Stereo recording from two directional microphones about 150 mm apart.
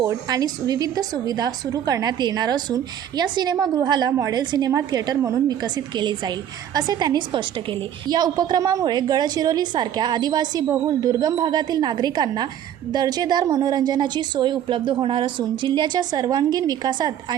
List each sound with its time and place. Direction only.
0.0 s a woman's voice: 25° right (ahead or behind)